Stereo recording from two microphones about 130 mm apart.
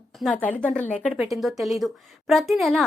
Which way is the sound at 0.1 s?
Centre (ahead or behind).